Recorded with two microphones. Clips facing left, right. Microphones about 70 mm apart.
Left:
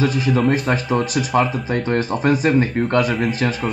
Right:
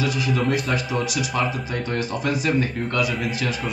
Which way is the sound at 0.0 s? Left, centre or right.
Left.